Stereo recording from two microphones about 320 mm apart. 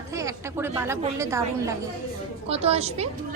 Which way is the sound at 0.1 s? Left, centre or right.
Centre.